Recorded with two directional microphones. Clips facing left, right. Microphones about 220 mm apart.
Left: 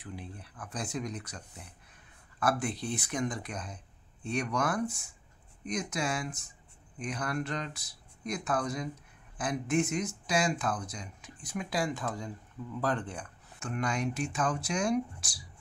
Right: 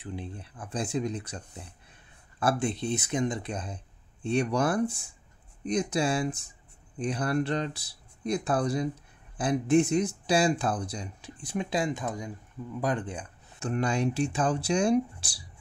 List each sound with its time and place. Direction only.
0.0 s speech: 25° right (ahead or behind)
13.6 s speech: 30° right (ahead or behind)